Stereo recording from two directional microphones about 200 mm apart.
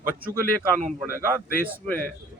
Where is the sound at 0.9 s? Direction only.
10° right (ahead or behind).